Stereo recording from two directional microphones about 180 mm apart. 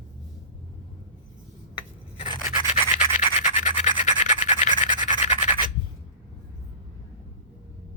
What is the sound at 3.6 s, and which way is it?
Rub, 40° left (ahead or behind).